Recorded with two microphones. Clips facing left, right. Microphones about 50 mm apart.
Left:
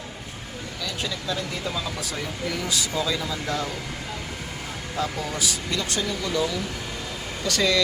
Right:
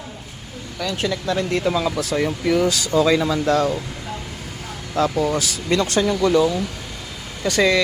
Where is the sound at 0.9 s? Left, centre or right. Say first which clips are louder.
Right 8 dB; right.